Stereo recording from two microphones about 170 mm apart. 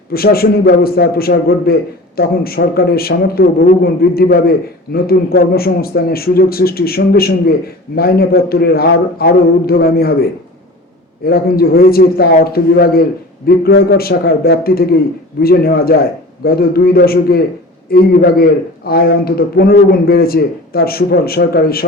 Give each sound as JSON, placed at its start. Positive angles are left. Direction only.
{"t": 0.1, "sound": "a man's voice", "side_deg": 65}
{"t": 11.3, "sound": "a man's voice", "side_deg": 65}